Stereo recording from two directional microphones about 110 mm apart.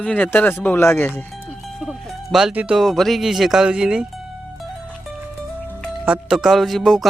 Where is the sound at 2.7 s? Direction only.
Centre (ahead or behind).